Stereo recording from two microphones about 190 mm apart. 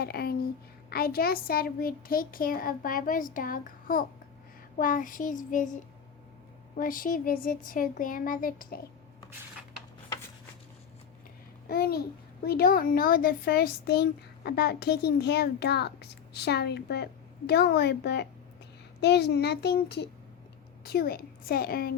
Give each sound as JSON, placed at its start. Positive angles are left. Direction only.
{"t": 0.0, "sound": "a child's voice", "side_deg": 55}
{"t": 6.7, "sound": "a child's voice", "side_deg": 45}
{"t": 11.7, "sound": "a child's voice", "side_deg": 55}